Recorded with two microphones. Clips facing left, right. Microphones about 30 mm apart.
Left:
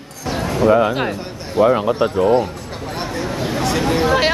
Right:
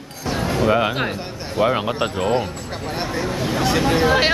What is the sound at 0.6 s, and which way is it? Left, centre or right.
Speech, right.